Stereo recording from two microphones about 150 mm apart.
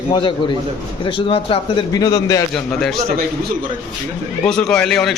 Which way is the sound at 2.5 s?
Centre (ahead or behind).